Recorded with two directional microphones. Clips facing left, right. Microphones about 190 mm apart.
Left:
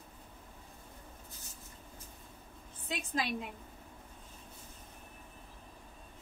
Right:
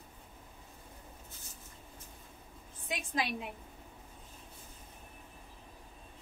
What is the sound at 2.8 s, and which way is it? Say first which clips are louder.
Speech: even; 10° right (ahead or behind).